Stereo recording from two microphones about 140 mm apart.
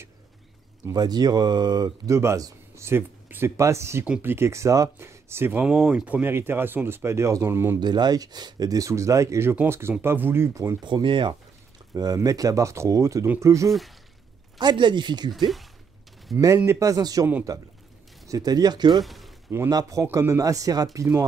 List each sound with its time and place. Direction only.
0.8 s speech: 30° right (ahead or behind)
7.8 s speech: 30° right (ahead or behind)
10.8 s speech: 35° right (ahead or behind)
13.7 s speech: centre (ahead or behind)
14.6 s speech: 30° right (ahead or behind)
16.5 s speech: 20° right (ahead or behind)
19.0 s a sound: centre (ahead or behind)
19.5 s speech: 20° right (ahead or behind)